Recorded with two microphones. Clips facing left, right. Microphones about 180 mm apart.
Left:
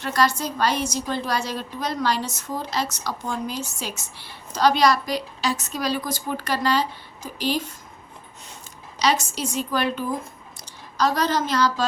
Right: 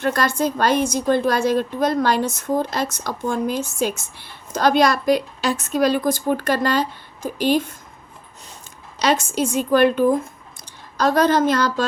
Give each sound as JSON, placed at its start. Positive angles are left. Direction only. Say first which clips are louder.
{"t": 0.0, "sound": "a woman's voice", "louder": "right 3 dB", "side_deg": -50}
{"t": 9.0, "sound": "a woman's voice", "louder": "right 4 dB", "side_deg": -50}